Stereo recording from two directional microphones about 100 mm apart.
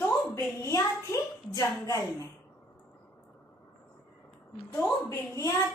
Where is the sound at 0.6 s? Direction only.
30° left (ahead or behind).